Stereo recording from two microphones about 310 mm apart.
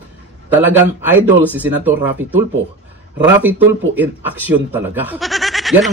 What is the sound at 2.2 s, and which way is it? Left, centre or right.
Speech, right.